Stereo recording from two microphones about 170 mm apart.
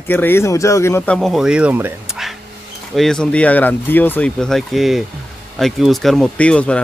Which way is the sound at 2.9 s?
5° left (ahead or behind).